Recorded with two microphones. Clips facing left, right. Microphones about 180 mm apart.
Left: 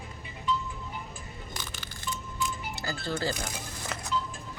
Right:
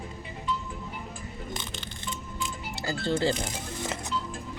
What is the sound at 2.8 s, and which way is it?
Speech, 25° right (ahead or behind).